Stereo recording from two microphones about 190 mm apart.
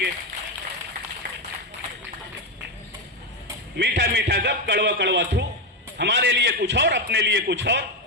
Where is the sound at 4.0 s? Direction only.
60° right (ahead or behind).